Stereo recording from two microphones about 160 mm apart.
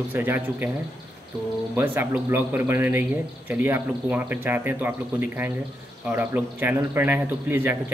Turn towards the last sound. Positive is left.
turn(degrees=-15)  # may be behind; listen again after turning